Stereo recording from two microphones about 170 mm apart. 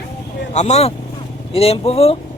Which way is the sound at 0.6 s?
40° left (ahead or behind).